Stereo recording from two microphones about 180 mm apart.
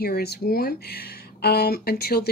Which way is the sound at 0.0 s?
60° left (ahead or behind).